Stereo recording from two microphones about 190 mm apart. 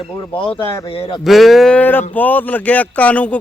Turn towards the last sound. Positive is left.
turn(degrees=5)  # may be behind; listen again after turning